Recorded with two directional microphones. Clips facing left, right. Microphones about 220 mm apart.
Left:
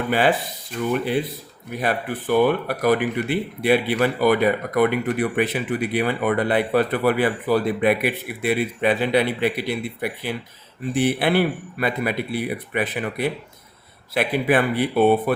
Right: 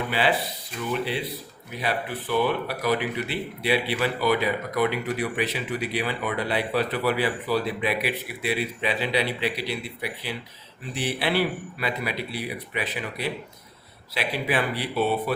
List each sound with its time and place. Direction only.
0.1 s speech: 45° left (ahead or behind)